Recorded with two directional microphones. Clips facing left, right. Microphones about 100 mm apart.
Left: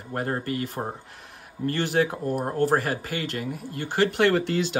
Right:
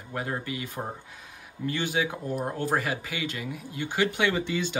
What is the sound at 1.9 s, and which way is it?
Speech, 50° left (ahead or behind).